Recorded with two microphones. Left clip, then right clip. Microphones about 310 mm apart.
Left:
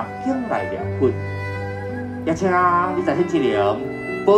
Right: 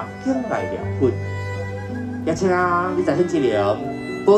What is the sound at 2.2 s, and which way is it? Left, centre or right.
Speech, left.